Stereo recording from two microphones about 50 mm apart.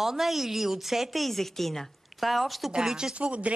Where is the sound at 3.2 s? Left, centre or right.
Right.